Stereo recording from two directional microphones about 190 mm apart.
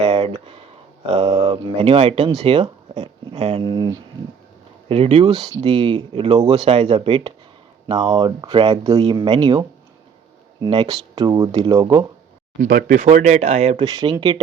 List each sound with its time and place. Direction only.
0.0 s a sound: 30° right (ahead or behind)
1.0 s speech: 25° right (ahead or behind)
12.6 s speech: 50° right (ahead or behind)
13.0 s speech: 40° right (ahead or behind)
13.8 s speech: 20° right (ahead or behind)